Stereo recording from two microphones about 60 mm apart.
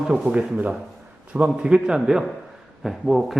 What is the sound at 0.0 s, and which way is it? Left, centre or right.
A man's voice, centre.